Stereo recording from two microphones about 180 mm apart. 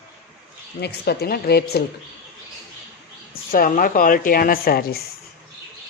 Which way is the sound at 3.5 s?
50° left (ahead or behind).